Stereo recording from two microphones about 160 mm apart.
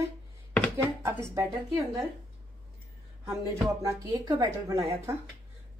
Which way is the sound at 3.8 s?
25° right (ahead or behind).